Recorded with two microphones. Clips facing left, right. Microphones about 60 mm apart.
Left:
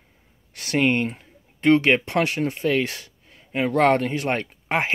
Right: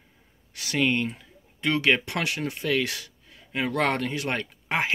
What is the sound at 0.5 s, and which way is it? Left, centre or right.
Speech, left.